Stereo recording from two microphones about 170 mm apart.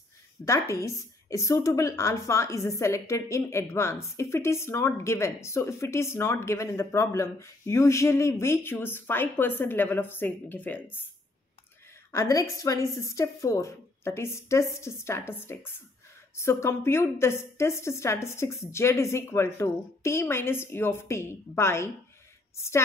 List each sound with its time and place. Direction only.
0.5 s a woman's voice: 15° left (ahead or behind)
12.2 s a woman's voice: 20° left (ahead or behind)